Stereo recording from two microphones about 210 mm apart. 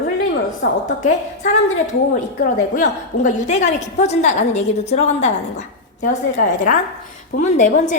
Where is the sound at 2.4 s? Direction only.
40° left (ahead or behind).